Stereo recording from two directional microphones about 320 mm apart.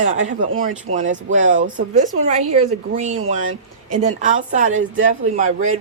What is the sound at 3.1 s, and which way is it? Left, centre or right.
Speech, right.